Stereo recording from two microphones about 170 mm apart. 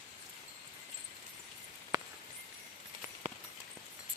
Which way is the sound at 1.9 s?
25° right (ahead or behind).